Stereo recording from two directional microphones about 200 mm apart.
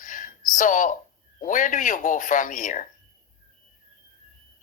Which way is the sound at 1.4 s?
40° left (ahead or behind).